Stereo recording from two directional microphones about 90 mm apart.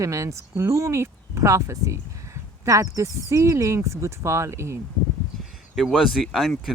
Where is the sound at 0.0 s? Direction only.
35° right (ahead or behind).